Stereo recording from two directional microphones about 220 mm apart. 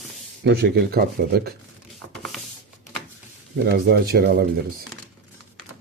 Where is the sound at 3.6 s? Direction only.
45° right (ahead or behind).